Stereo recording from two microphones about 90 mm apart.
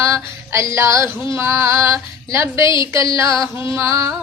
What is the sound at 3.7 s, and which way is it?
Female singing, 30° right (ahead or behind).